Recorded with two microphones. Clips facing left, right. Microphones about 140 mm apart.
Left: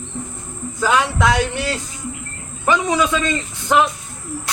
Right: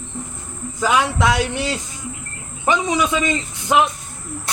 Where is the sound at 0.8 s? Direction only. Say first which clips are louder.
Even; 15° right (ahead or behind).